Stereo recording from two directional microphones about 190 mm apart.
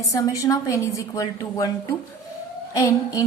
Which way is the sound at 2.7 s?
20° left (ahead or behind).